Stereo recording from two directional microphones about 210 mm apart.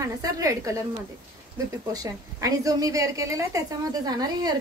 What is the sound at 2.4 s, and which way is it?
Speech, 15° right (ahead or behind).